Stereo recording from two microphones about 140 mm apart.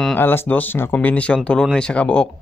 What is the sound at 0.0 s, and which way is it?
Speech, 10° left (ahead or behind).